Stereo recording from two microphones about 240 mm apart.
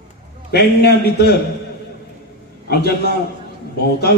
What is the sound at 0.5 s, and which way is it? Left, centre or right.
Speech, left.